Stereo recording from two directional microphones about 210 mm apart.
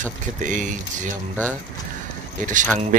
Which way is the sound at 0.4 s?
35° right (ahead or behind).